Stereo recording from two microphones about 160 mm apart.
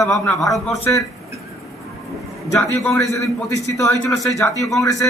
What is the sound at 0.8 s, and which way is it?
Speech, 20° left (ahead or behind).